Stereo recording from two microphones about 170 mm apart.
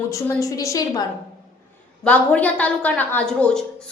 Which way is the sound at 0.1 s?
20° left (ahead or behind).